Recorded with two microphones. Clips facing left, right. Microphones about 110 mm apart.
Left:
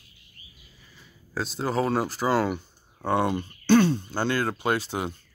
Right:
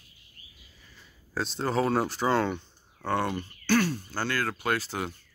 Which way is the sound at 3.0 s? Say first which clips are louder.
Left 4 dB; 15° left (ahead or behind).